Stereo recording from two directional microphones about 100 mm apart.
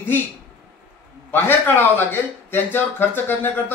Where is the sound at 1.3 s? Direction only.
20° left (ahead or behind).